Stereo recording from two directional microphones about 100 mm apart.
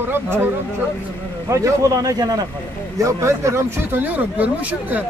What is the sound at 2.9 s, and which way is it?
Speech, 30° right (ahead or behind).